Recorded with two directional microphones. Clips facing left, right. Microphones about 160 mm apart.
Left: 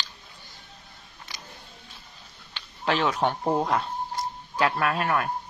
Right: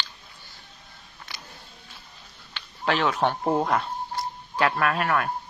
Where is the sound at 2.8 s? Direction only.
30° left (ahead or behind).